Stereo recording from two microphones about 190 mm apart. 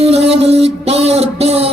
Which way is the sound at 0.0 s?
35° right (ahead or behind).